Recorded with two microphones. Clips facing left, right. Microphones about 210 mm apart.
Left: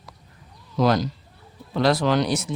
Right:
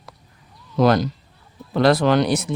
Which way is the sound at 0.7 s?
60° right (ahead or behind).